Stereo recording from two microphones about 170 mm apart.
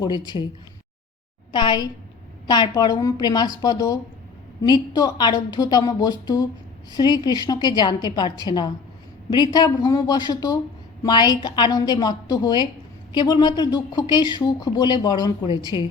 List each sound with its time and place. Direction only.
0.0 s speech: 25° left (ahead or behind)
1.5 s speech: 25° left (ahead or behind)